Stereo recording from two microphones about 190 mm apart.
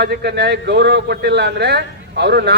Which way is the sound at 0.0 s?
60° right (ahead or behind).